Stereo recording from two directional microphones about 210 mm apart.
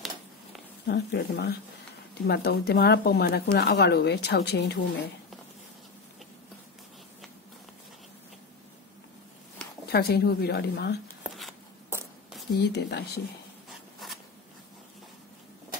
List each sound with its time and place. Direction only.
0.8 s a woman's voice: 50° left (ahead or behind)
9.8 s a woman's voice: 50° left (ahead or behind)
11.2 s a sound: centre (ahead or behind)
12.5 s a woman's voice: 50° left (ahead or behind)
13.7 s insect: centre (ahead or behind)